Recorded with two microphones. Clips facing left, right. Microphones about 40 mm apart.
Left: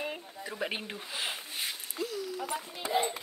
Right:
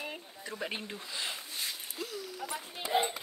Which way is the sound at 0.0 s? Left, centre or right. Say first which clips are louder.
Left 4 dB; centre.